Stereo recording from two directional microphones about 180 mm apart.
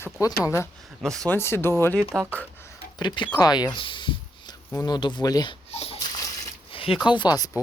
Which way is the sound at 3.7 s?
25° left (ahead or behind).